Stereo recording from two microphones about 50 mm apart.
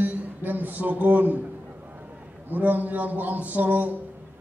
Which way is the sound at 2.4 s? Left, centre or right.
Right.